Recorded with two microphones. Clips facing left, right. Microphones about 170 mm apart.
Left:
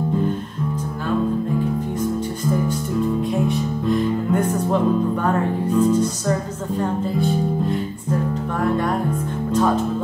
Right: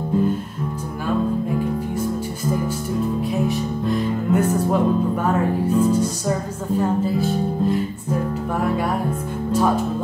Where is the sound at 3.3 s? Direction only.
Centre (ahead or behind).